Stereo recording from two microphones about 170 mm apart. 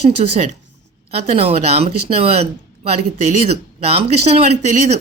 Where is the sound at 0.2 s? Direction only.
45° right (ahead or behind).